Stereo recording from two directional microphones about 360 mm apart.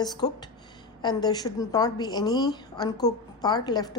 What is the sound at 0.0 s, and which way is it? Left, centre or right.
Speech, centre.